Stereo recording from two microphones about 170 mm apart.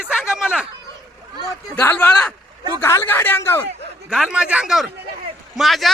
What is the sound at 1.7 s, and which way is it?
A woman's voice, 10° left (ahead or behind).